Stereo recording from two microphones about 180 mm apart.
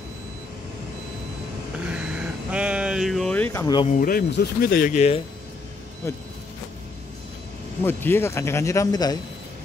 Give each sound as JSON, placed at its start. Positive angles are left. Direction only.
{"t": 1.9, "sound": "vehicle", "side_deg": -5}
{"t": 3.6, "sound": "speech", "side_deg": 25}
{"t": 3.9, "sound": "speech", "side_deg": 50}
{"t": 4.3, "sound": "speech", "side_deg": 60}
{"t": 6.0, "sound": "speech", "side_deg": 15}
{"t": 7.8, "sound": "speech", "side_deg": 10}